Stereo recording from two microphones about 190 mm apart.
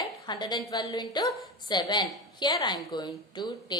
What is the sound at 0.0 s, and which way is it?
A woman's voice, 20° left (ahead or behind).